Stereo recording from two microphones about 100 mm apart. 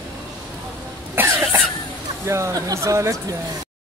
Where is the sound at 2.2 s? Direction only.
30° right (ahead or behind).